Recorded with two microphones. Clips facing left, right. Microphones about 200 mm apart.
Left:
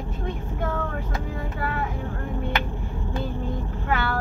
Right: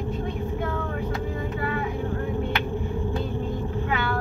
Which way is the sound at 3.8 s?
45° left (ahead or behind).